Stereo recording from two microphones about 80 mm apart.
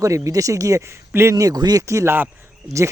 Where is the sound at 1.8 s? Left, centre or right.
Right.